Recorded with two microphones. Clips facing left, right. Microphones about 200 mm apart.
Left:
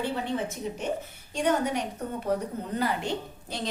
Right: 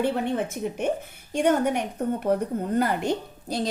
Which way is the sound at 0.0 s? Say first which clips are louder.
Right 5 dB; 55° right (ahead or behind).